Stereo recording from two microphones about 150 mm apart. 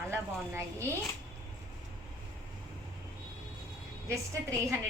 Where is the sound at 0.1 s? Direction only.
15° right (ahead or behind).